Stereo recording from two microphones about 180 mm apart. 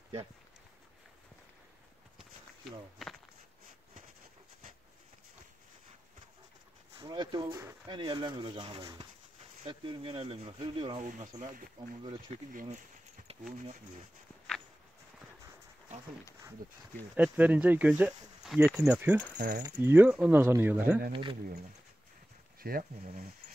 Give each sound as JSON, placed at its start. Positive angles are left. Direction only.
{"t": 3.0, "sound": "speech", "side_deg": 0}
{"t": 7.0, "sound": "speech", "side_deg": -25}
{"t": 11.0, "sound": "speech", "side_deg": -45}
{"t": 12.5, "sound": "speech", "side_deg": -45}
{"t": 13.3, "sound": "a sound", "side_deg": -35}
{"t": 17.1, "sound": "speech", "side_deg": -10}
{"t": 19.3, "sound": "speech", "side_deg": -45}
{"t": 19.8, "sound": "speech", "side_deg": -10}
{"t": 21.1, "sound": "speech", "side_deg": -30}
{"t": 22.6, "sound": "speech", "side_deg": -55}